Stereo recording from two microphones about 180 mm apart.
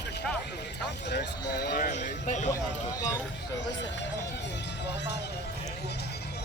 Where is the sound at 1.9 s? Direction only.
40° left (ahead or behind).